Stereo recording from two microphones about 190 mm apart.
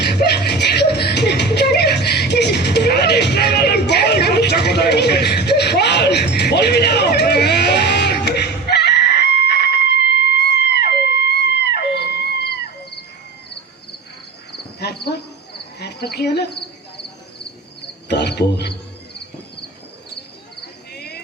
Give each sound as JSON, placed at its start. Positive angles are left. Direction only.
{"t": 0.0, "sound": "a sound", "side_deg": 60}
{"t": 14.5, "sound": "cricket", "side_deg": 60}
{"t": 18.1, "sound": "cricket", "side_deg": 60}
{"t": 20.9, "sound": "cricket", "side_deg": 60}